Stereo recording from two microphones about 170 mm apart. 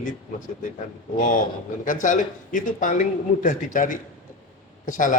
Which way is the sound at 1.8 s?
50° left (ahead or behind).